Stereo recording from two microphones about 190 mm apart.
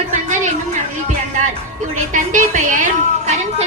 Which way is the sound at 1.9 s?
40° right (ahead or behind).